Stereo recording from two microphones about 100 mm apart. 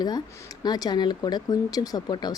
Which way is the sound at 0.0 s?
40° left (ahead or behind).